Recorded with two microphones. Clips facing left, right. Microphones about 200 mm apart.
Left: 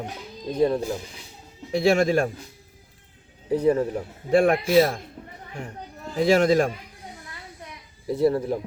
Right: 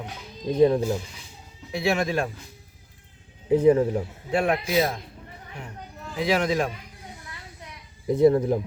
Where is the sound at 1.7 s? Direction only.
45° left (ahead or behind).